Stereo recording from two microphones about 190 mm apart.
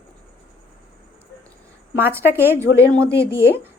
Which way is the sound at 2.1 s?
10° right (ahead or behind).